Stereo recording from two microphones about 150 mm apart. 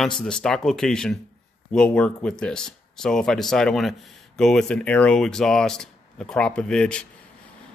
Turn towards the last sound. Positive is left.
turn(degrees=5)  # may be behind; listen again after turning